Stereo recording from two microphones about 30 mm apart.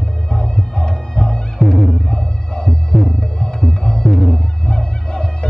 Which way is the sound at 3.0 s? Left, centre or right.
Left.